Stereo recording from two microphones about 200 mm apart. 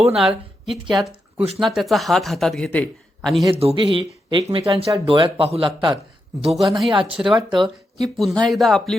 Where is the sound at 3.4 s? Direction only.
30° right (ahead or behind).